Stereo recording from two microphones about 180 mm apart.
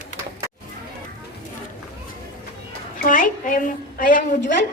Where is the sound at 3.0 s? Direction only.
50° left (ahead or behind).